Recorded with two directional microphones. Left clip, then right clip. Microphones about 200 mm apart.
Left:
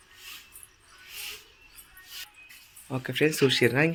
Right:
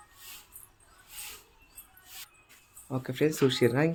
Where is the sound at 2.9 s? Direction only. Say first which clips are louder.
Left 3 dB; centre (ahead or behind).